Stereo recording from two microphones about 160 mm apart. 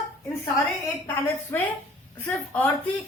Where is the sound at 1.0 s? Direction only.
15° left (ahead or behind).